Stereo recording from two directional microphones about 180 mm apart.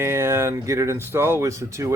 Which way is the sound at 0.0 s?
15° right (ahead or behind).